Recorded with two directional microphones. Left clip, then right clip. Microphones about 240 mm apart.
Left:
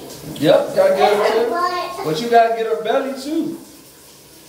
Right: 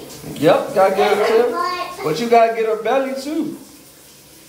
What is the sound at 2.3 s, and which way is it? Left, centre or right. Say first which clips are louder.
Speech: even; right.